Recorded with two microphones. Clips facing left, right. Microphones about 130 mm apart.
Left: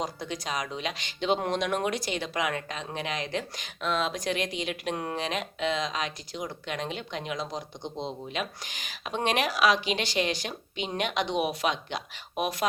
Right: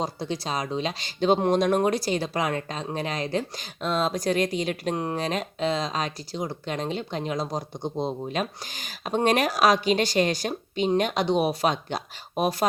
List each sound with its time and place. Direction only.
0.0 s speech: 30° right (ahead or behind)